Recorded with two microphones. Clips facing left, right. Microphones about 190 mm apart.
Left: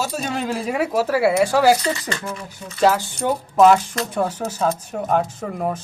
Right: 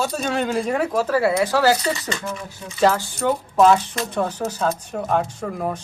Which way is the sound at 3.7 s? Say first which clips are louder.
Left 1 dB; 5° left (ahead or behind).